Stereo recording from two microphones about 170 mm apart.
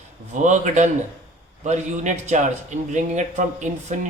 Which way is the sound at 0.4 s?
45° right (ahead or behind).